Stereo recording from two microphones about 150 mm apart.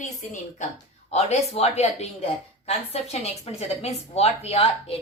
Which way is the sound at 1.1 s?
45° left (ahead or behind).